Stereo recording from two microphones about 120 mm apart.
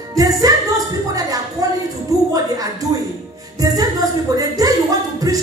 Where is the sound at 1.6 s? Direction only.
30° right (ahead or behind).